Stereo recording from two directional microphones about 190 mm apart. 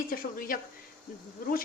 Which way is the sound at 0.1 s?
50° left (ahead or behind).